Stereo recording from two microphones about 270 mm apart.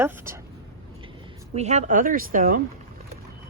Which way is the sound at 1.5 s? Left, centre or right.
Right.